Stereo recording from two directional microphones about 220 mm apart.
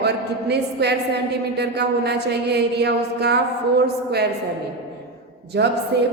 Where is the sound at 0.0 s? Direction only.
50° right (ahead or behind).